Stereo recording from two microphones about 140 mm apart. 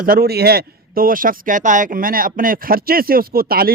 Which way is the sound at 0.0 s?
90° right.